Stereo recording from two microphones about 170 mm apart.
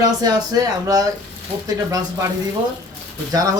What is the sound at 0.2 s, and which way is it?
A man's voice, 25° right (ahead or behind).